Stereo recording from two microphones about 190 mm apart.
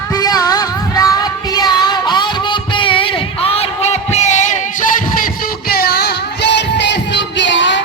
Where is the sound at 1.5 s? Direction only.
20° left (ahead or behind); by 5.2 s 40° left (ahead or behind).